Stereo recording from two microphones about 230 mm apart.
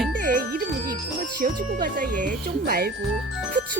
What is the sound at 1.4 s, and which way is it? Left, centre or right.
Speech, right.